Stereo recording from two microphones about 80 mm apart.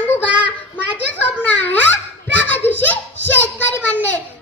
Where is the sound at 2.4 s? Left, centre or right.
Left.